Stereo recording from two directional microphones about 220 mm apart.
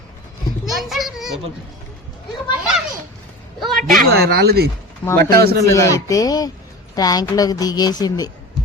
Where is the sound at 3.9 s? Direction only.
45° right (ahead or behind).